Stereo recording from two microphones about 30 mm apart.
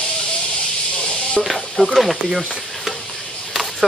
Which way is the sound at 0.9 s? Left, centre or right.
Left.